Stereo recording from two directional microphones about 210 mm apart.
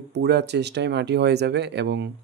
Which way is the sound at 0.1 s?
55° right (ahead or behind).